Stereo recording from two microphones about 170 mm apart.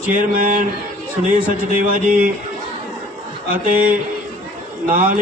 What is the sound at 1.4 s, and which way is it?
Speech, 55° right (ahead or behind).